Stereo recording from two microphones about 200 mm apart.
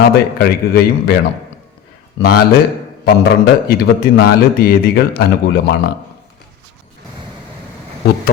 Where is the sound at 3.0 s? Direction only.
50° left (ahead or behind).